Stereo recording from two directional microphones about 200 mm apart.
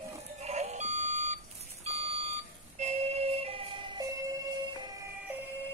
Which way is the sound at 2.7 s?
35° right (ahead or behind).